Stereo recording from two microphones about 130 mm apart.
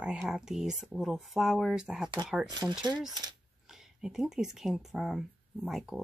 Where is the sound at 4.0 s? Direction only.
5° right (ahead or behind).